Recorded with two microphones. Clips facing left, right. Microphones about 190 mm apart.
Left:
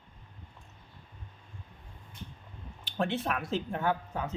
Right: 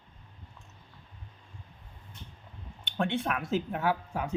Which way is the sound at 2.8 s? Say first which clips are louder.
Right 1 dB; centre (ahead or behind).